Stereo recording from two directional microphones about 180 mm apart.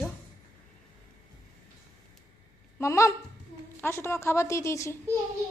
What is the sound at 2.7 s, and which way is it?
A woman's voice, 15° left (ahead or behind).